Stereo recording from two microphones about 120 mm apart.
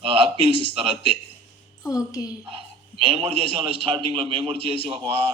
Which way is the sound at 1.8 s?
30° left (ahead or behind).